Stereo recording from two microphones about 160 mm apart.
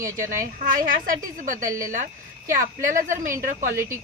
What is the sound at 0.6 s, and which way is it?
A woman's voice, 60° right (ahead or behind).